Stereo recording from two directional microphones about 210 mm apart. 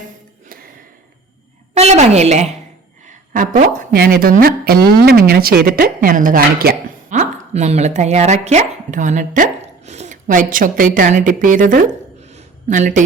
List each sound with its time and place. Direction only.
1.7 s a woman's voice: 30° right (ahead or behind)
3.1 s a sound: 40° right (ahead or behind)
3.8 s speech: 45° right (ahead or behind)